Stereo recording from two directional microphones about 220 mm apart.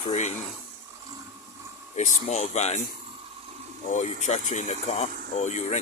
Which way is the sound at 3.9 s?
30° left (ahead or behind).